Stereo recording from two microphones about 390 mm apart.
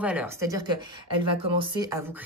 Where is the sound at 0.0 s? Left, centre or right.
Centre.